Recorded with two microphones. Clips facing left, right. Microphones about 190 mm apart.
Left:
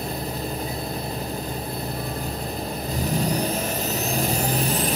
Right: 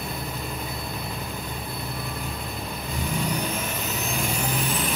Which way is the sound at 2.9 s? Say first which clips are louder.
Left 4 dB; 40° left (ahead or behind).